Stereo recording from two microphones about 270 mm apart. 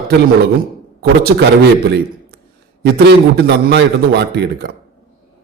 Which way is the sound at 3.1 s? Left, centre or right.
Right.